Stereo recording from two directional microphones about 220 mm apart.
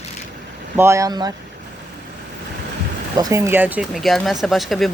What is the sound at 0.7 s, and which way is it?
Speech, 10° right (ahead or behind).